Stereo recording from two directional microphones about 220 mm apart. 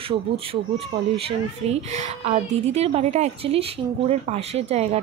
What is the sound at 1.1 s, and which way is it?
A woman's voice, 30° right (ahead or behind).